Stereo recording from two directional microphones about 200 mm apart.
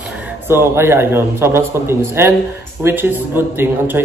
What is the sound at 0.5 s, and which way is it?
Speech, 10° right (ahead or behind).